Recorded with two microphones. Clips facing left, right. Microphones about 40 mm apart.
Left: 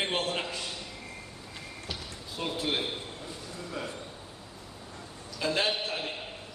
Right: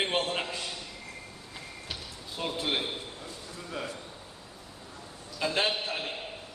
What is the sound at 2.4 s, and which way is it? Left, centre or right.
Speech, centre.